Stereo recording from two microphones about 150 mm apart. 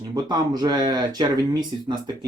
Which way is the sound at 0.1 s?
25° right (ahead or behind).